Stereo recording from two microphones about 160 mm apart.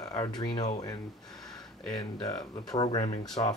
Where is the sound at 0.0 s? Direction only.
20° left (ahead or behind).